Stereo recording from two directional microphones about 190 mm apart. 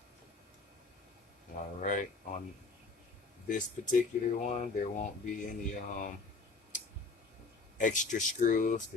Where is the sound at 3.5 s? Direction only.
40° left (ahead or behind).